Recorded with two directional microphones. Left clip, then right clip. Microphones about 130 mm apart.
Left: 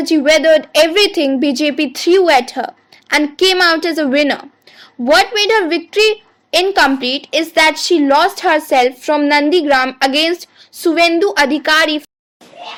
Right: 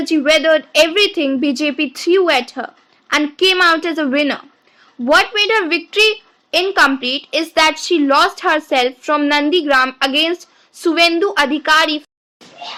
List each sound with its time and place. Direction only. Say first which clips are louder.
0.0 s a woman's voice: left 2 dB; 40° left (ahead or behind)